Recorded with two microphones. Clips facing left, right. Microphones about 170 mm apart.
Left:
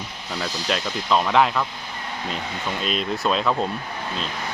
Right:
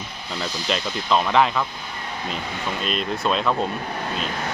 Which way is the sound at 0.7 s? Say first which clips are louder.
Even; centre (ahead or behind).